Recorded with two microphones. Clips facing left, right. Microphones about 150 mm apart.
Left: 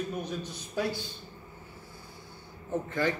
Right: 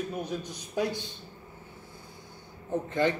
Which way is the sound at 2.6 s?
20° right (ahead or behind).